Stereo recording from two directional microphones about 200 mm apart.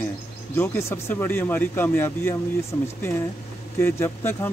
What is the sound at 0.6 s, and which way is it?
Speech, 10° left (ahead or behind).